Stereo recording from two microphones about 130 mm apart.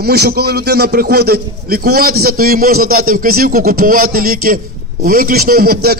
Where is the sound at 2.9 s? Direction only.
90° right.